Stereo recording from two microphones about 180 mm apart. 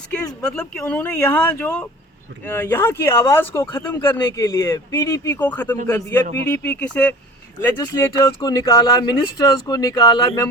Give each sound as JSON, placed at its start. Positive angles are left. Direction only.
{"t": 0.4, "sound": "speech", "side_deg": 5}
{"t": 7.8, "sound": "speech", "side_deg": 20}